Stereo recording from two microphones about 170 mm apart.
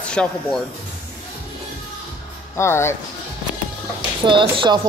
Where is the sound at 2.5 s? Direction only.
15° left (ahead or behind).